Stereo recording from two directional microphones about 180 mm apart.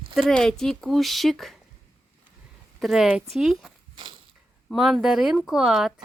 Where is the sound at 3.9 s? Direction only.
25° right (ahead or behind).